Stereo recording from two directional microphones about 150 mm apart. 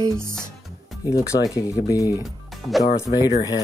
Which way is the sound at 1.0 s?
25° left (ahead or behind).